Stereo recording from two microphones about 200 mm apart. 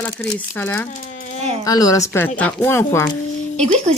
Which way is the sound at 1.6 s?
20° left (ahead or behind).